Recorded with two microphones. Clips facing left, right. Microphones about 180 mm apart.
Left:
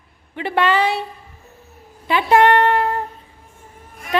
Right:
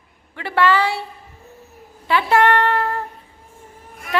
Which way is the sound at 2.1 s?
20° left (ahead or behind).